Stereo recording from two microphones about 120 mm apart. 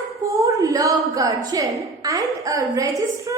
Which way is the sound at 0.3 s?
25° right (ahead or behind).